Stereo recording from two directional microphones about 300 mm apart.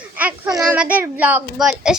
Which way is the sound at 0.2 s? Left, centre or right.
Centre.